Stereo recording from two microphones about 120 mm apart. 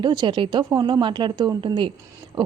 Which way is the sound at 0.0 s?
40° right (ahead or behind).